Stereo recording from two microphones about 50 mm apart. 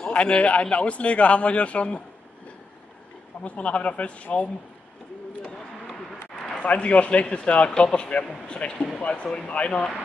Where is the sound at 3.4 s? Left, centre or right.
Left.